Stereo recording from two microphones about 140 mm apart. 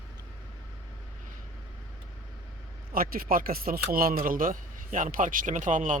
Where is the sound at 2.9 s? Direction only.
90° right; by 6.0 s 65° right (ahead or behind).